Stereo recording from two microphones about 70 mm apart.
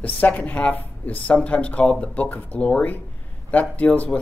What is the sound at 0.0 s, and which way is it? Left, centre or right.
Speech, left.